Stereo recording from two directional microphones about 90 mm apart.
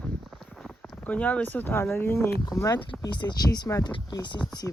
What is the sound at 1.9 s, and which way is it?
Speech, 30° left (ahead or behind).